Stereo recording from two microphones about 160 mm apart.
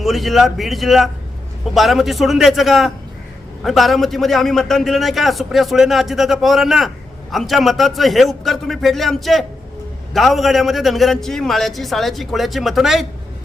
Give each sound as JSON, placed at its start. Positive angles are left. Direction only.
{"t": 0.0, "sound": "a man's voice", "side_deg": 0}